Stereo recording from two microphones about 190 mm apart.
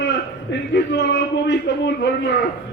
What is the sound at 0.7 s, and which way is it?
Speech, 65° left (ahead or behind).